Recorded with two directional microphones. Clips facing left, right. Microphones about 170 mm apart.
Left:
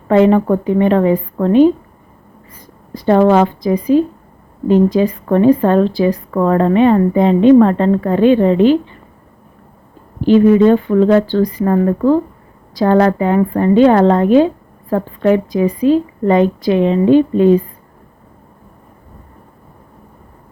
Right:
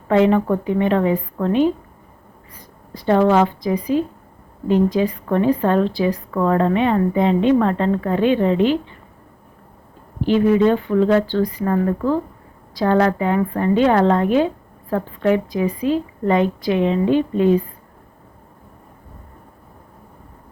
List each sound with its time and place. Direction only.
0.1 s a woman's voice: 40° left (ahead or behind)
2.9 s a woman's voice: 45° left (ahead or behind)
10.2 s a woman's voice: 40° left (ahead or behind)